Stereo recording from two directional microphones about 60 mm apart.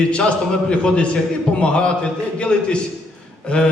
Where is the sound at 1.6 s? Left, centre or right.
Centre.